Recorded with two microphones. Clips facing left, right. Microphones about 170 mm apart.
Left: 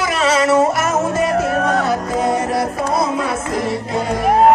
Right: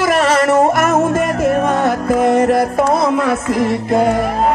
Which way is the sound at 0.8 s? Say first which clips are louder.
Right 3 dB; 50° right (ahead or behind).